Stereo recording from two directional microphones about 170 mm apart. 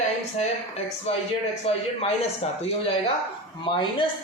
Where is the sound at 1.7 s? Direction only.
35° left (ahead or behind).